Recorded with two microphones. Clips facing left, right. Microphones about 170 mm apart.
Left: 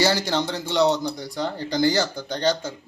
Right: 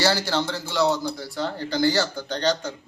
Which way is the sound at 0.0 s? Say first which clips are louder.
Left 1 dB; 15° left (ahead or behind).